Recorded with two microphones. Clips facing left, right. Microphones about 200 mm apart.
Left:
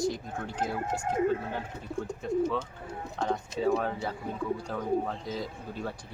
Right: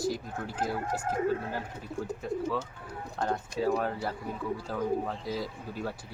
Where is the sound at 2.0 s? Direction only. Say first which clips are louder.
Left 4 dB; 5° right (ahead or behind).